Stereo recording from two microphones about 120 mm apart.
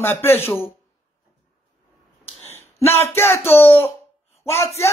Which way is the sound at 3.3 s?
15° left (ahead or behind).